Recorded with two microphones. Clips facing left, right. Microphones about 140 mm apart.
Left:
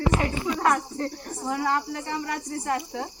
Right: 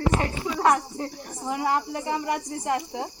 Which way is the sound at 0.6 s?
20° right (ahead or behind).